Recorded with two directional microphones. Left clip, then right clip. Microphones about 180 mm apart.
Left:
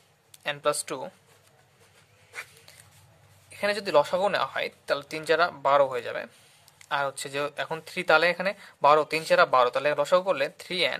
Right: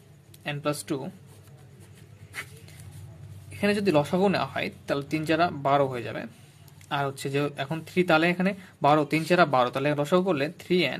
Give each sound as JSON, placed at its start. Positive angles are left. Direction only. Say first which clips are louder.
{"t": 0.4, "sound": "speech", "louder": "left 3 dB", "side_deg": 25}
{"t": 3.5, "sound": "speech", "louder": "left 1 dB", "side_deg": 15}